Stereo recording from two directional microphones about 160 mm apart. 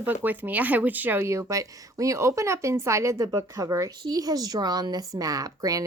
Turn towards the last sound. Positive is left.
turn(degrees=-20)  # may be behind; listen again after turning